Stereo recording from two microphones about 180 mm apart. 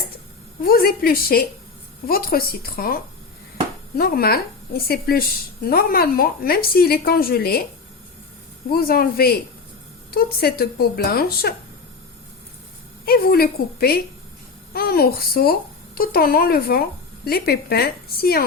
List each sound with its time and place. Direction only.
0.6 s a woman's voice: 55° left (ahead or behind)
8.7 s a woman's voice: 55° left (ahead or behind)
13.1 s a woman's voice: 60° left (ahead or behind)